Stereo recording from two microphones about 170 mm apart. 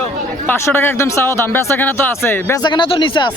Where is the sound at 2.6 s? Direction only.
30° left (ahead or behind).